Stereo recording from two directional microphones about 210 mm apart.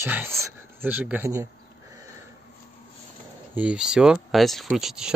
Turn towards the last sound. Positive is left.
turn(degrees=0)  # may be behind; listen again after turning